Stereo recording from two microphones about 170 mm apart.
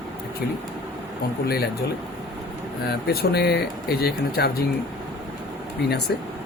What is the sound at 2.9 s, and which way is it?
Speech, 70° left (ahead or behind).